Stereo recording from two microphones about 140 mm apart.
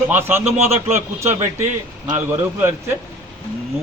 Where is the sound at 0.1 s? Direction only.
15° right (ahead or behind).